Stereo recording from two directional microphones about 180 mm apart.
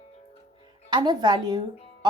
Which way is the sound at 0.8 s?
25° right (ahead or behind).